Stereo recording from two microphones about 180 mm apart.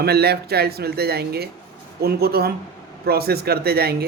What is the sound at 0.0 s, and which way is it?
Speech, 60° right (ahead or behind).